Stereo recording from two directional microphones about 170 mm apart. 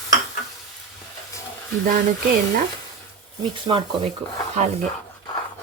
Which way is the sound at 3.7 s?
30° right (ahead or behind).